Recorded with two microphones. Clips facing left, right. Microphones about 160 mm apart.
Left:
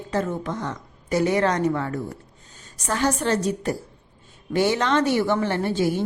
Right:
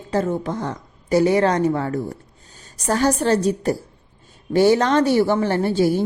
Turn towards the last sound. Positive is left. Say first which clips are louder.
# right 4 dB
turn(degrees=-35)  # may be behind; listen again after turning